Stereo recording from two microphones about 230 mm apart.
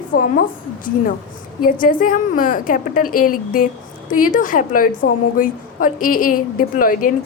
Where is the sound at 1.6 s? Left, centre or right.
Left.